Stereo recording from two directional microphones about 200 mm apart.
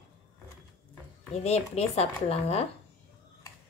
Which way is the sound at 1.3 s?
30° left (ahead or behind).